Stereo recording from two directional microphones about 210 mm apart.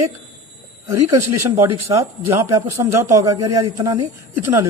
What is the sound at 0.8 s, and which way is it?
A man's voice, 15° right (ahead or behind).